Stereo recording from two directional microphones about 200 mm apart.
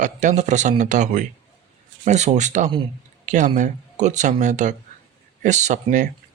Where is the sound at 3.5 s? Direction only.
35° right (ahead or behind).